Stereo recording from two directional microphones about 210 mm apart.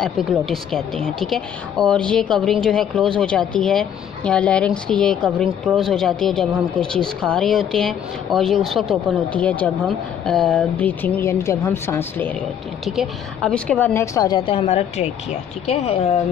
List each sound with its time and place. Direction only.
0.0 s a woman's voice: centre (ahead or behind)
12.8 s a woman's voice: centre (ahead or behind); by 16.2 s 30° left (ahead or behind)